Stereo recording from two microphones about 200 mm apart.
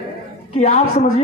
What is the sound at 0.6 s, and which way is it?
Speech, 35° left (ahead or behind).